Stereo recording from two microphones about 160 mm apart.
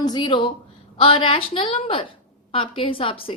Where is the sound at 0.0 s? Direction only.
25° left (ahead or behind).